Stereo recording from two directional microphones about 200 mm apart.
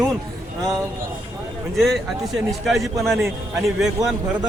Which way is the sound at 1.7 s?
Centre (ahead or behind).